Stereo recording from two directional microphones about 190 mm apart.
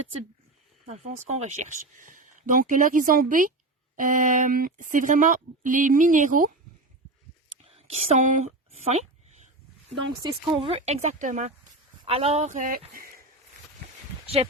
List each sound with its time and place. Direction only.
0.9 s speech: 35° right (ahead or behind)
7.6 s a sound: 30° right (ahead or behind)
10.2 s speech: 20° right (ahead or behind); by 11.5 s 40° right (ahead or behind)
12.0 s speech: 30° right (ahead or behind)